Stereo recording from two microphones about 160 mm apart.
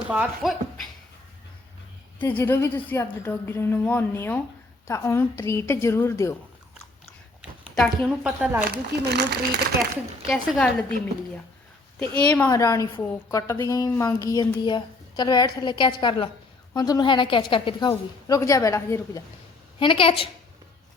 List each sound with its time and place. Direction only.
0.1 s speech: 5° right (ahead or behind)
2.1 s a woman's voice: 10° left (ahead or behind)
7.8 s a woman's voice: 5° right (ahead or behind)
8.7 s speech: 90° right
10.2 s a woman's voice: centre (ahead or behind)
11.9 s a woman's voice: 5° left (ahead or behind)
12.5 s a woman's voice: 20° left (ahead or behind)
19.8 s a woman's voice: 30° left (ahead or behind)